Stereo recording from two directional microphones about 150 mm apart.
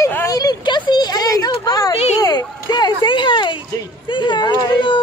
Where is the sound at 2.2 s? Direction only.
25° left (ahead or behind).